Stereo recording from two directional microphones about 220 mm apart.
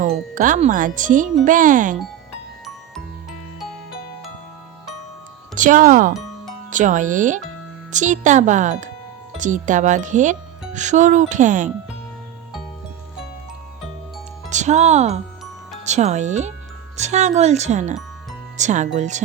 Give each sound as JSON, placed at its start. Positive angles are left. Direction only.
{"t": 0.0, "sound": "speech", "side_deg": -35}
{"t": 5.5, "sound": "speech", "side_deg": -35}
{"t": 14.5, "sound": "speech", "side_deg": -30}